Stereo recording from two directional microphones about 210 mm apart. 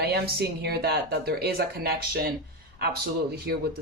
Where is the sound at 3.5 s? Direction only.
50° right (ahead or behind).